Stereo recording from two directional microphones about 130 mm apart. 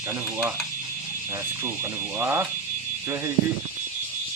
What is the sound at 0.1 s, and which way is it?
Speech, 10° right (ahead or behind).